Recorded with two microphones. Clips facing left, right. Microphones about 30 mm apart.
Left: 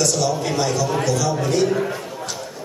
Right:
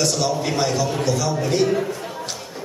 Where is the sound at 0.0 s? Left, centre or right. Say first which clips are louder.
Left 1 dB; right.